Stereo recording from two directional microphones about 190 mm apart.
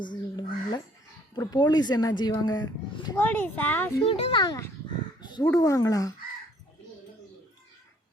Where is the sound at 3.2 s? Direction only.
10° left (ahead or behind).